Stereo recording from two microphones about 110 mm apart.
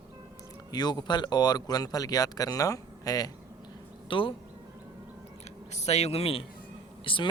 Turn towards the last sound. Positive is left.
turn(degrees=55)  # may be behind; listen again after turning